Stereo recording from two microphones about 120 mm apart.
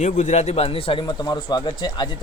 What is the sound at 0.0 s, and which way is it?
Speech, 80° left.